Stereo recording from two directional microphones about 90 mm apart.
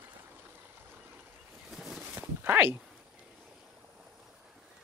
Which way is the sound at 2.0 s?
20° right (ahead or behind).